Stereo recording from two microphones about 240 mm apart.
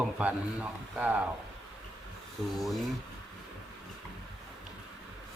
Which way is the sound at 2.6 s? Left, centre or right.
Centre.